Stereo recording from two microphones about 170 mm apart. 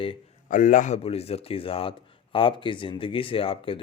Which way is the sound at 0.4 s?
50° left (ahead or behind).